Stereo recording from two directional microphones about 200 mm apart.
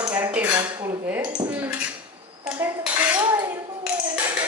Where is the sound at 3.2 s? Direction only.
20° right (ahead or behind).